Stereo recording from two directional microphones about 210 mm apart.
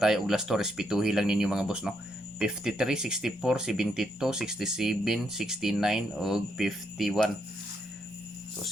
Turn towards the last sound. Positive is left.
turn(degrees=0)  # may be behind; listen again after turning